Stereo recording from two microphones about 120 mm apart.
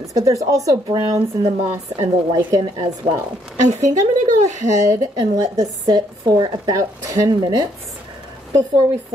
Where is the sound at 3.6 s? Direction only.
85° right.